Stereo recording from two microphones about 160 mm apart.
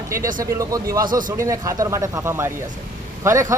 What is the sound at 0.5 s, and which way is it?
Speech, 20° right (ahead or behind).